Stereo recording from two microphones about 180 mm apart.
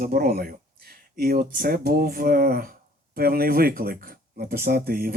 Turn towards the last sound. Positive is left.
turn(degrees=-60)  # may be behind; listen again after turning